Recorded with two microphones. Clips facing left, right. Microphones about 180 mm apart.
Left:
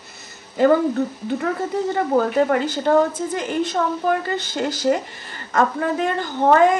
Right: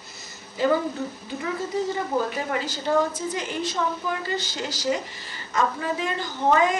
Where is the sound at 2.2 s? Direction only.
60° left (ahead or behind).